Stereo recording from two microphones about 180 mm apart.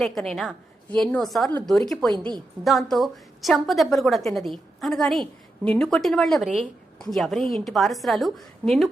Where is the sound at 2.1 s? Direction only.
25° right (ahead or behind).